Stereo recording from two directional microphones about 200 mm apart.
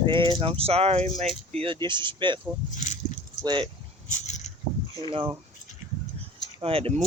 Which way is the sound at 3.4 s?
20° right (ahead or behind).